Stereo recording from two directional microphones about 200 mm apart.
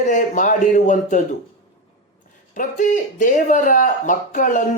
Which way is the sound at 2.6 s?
40° left (ahead or behind).